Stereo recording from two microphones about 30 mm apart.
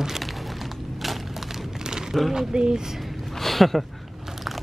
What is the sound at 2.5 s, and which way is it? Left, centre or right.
Speech, right.